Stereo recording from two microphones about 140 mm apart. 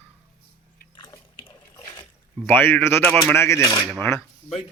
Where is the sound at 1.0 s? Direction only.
35° left (ahead or behind).